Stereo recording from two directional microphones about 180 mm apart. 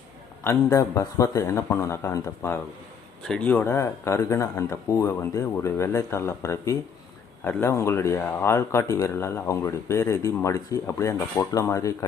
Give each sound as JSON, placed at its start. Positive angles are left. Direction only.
{"t": 0.4, "sound": "speech", "side_deg": 15}